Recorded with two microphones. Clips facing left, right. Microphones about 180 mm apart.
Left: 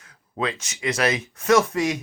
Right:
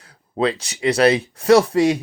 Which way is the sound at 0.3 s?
35° right (ahead or behind).